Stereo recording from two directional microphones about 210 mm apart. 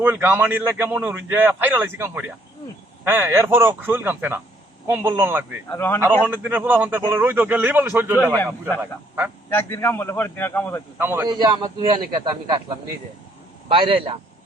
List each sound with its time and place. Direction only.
0.0 s a man's voice: 10° right (ahead or behind)
5.7 s a man's voice: 10° left (ahead or behind)
6.2 s a man's voice: 10° right (ahead or behind)
8.1 s a man's voice: 10° left (ahead or behind)
8.8 s a man's voice: 10° right (ahead or behind)
9.5 s a man's voice: 10° left (ahead or behind)
10.9 s a man's voice: 10° right (ahead or behind)
13.7 s a man's voice: 25° right (ahead or behind)